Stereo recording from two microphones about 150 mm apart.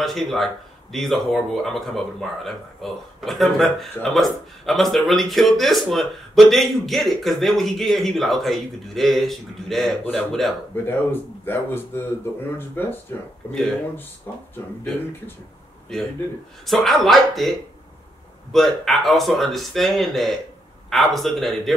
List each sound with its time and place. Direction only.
0.0 s a man's voice: centre (ahead or behind)
10.7 s a man's voice: 15° left (ahead or behind)
14.3 s speech: 20° left (ahead or behind)
15.9 s a man's voice: 5° left (ahead or behind)